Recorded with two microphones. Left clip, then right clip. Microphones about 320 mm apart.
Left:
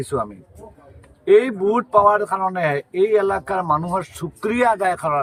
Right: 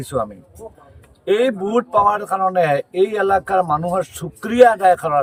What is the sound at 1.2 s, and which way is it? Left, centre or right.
Speech, centre.